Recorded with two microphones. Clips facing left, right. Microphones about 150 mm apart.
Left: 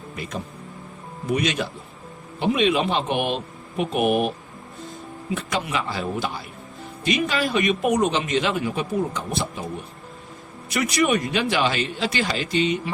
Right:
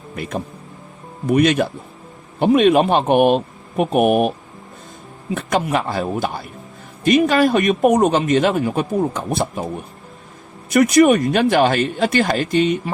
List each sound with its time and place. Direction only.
1.3 s speech: 55° right (ahead or behind)
5.3 s speech: 50° right (ahead or behind)
10.7 s speech: 50° right (ahead or behind)